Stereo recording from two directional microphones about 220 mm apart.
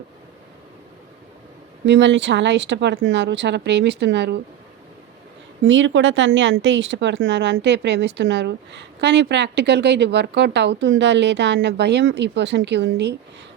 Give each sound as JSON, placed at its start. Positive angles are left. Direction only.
{"t": 1.8, "sound": "speech", "side_deg": -55}
{"t": 5.6, "sound": "speech", "side_deg": -60}